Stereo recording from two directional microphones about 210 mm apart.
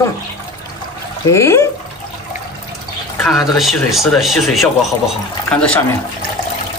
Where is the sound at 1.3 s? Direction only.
15° left (ahead or behind).